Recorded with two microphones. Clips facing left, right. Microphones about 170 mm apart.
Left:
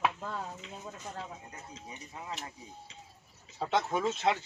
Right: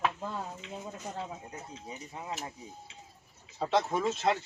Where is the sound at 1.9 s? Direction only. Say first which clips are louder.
Right 3 dB; 25° right (ahead or behind).